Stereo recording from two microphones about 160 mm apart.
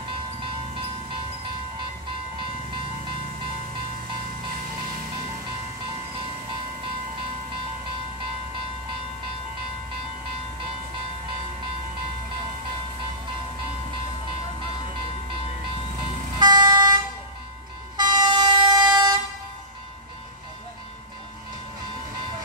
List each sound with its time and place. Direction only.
16.3 s vehicle: 25° right (ahead or behind)